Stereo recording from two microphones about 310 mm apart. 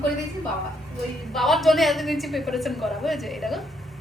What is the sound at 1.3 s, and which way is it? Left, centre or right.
A woman's voice, centre.